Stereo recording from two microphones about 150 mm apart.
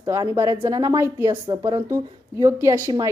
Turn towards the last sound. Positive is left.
turn(degrees=-20)  # may be behind; listen again after turning